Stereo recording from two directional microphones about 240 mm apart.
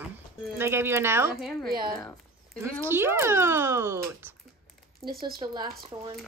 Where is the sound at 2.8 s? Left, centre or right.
Centre.